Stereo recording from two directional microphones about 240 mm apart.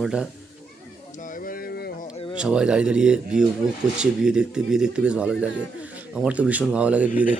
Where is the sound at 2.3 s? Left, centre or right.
Centre.